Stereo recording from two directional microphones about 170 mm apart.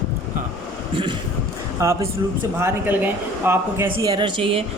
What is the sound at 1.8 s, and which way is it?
Speech, 20° right (ahead or behind).